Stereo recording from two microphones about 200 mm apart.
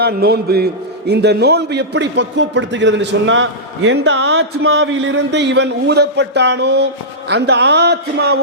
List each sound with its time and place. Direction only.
0.0 s a man's voice: 50° right (ahead or behind)